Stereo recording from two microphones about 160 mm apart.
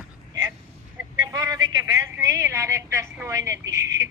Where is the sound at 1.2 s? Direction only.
20° right (ahead or behind).